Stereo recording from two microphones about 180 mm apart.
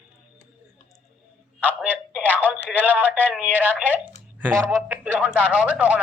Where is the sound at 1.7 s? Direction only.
10° right (ahead or behind).